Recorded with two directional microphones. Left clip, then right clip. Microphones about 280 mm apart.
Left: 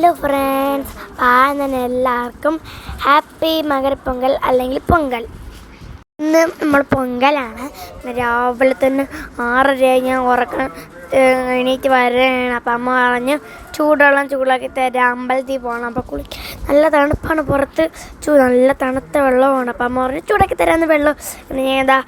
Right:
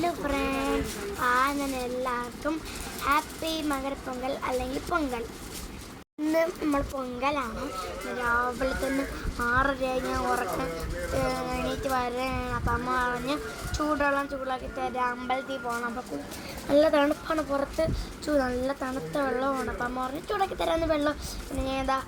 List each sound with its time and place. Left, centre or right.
0.0 s a sound: left
1.2 s speech: left
6.3 s a woman's voice: left